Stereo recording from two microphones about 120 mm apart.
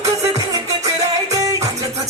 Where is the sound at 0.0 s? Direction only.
25° right (ahead or behind).